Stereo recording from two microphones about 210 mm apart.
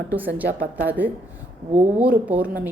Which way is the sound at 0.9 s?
10° right (ahead or behind).